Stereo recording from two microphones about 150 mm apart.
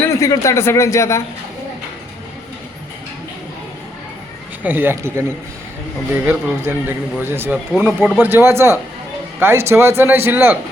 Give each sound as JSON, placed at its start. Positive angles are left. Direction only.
{"t": 0.0, "sound": "speech", "side_deg": 20}
{"t": 4.6, "sound": "a man's voice", "side_deg": -15}